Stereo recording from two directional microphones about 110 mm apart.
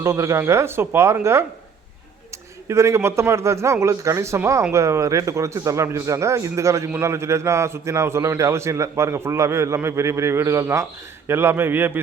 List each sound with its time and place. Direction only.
0.0 s a man's voice: 30° right (ahead or behind)
2.6 s a man's voice: 25° right (ahead or behind)